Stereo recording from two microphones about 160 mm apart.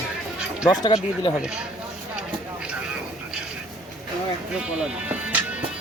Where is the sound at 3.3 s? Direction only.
5° right (ahead or behind).